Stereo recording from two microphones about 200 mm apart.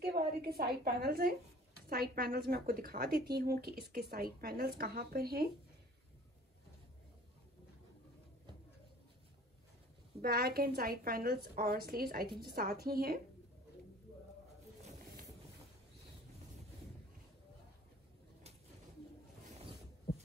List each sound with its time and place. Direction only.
0.0 s a woman's voice: 50° right (ahead or behind)
10.2 s a woman's voice: 50° right (ahead or behind)
14.8 s boat: 35° right (ahead or behind)